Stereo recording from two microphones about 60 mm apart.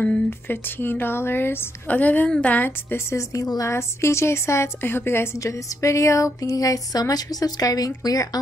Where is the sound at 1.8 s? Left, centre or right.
Left.